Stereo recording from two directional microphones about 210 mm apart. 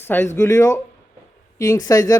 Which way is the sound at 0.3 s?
15° left (ahead or behind).